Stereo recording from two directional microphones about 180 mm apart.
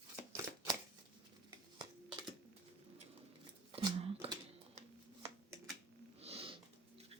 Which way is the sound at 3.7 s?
25° right (ahead or behind).